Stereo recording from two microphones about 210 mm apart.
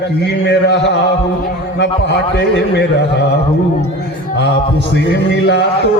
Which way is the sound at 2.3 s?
50° left (ahead or behind).